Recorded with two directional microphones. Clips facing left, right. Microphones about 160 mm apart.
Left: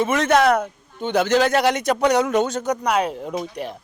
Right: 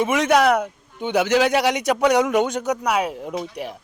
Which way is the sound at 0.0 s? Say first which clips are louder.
Even; 10° right (ahead or behind).